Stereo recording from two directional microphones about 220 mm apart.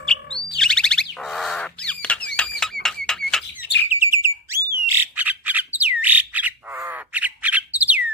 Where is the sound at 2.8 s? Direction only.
50° left (ahead or behind).